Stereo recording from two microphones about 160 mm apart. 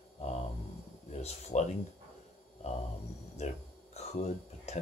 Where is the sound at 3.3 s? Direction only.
45° left (ahead or behind).